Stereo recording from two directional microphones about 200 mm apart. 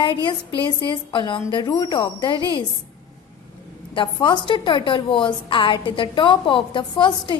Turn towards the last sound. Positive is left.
turn(degrees=25)  # may be behind; listen again after turning